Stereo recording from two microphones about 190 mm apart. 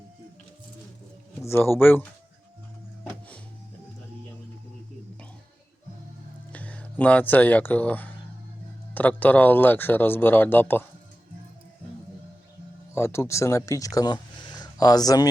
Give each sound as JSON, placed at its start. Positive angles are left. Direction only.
{"t": 1.4, "sound": "speech", "side_deg": 10}
{"t": 6.5, "sound": "speech", "side_deg": 5}
{"t": 12.9, "sound": "speech", "side_deg": 15}